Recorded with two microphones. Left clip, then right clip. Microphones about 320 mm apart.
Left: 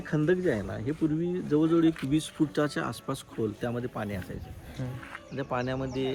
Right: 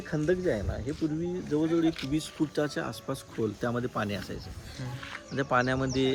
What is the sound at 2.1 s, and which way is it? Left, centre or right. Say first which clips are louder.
Speech: left 2 dB; left.